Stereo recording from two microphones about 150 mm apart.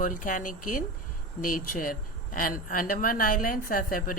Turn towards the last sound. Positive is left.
turn(degrees=70)  # may be behind; listen again after turning